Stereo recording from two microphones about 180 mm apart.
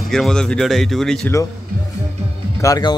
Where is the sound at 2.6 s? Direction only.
20° left (ahead or behind).